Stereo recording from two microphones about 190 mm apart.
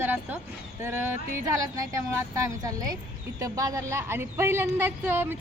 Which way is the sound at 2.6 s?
20° right (ahead or behind).